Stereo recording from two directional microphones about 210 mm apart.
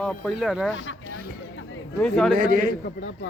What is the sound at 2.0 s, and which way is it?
Speech, 5° left (ahead or behind).